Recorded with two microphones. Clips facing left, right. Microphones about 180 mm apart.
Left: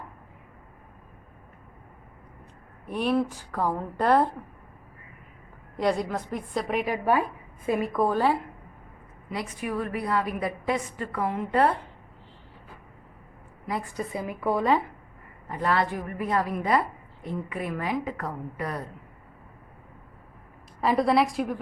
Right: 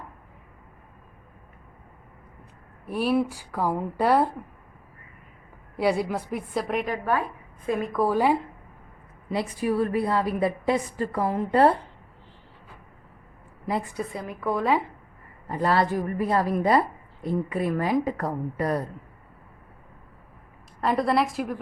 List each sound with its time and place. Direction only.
2.8 s a woman's voice: 5° right (ahead or behind)
5.7 s a woman's voice: 5° right (ahead or behind)
6.9 s a woman's voice: 10° left (ahead or behind); by 8.4 s 10° right (ahead or behind)
9.3 s a woman's voice: 35° right (ahead or behind)
13.9 s speech: centre (ahead or behind)
15.4 s a woman's voice: 35° right (ahead or behind)
20.8 s speech: centre (ahead or behind)